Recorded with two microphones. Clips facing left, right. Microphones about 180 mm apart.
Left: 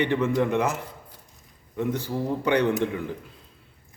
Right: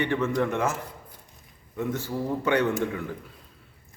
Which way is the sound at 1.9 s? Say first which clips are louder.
Left 1 dB; 15° left (ahead or behind).